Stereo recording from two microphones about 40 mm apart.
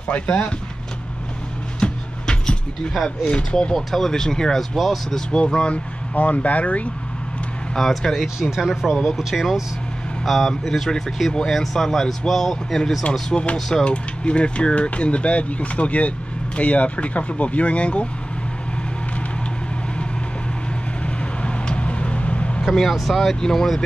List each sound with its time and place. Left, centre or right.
0.1 s speech: left
1.8 s music: left
3.7 s speech: centre
4.7 s speech: centre
5.1 s speech: left
6.1 s speech: left
7.8 s speech: centre
8.4 s speech: centre
13.3 s speech: left
21.0 s vehicle: left
22.7 s speech: centre